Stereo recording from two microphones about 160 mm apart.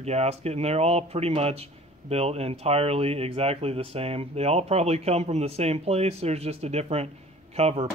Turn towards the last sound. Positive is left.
turn(degrees=-40)  # may be behind; listen again after turning